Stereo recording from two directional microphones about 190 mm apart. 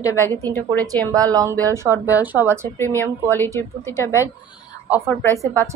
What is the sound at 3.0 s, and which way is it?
Speech, 10° left (ahead or behind).